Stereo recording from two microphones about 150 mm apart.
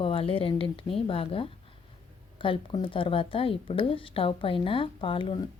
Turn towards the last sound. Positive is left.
turn(degrees=35)  # may be behind; listen again after turning